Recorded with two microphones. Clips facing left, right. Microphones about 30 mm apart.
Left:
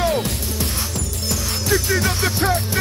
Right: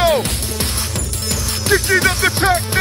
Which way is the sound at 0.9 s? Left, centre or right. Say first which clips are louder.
Right 2 dB; right.